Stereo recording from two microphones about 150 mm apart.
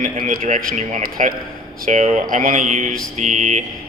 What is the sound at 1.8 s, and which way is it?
Speech, 50° right (ahead or behind).